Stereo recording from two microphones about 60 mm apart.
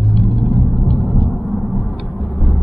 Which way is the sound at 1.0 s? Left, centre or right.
Centre.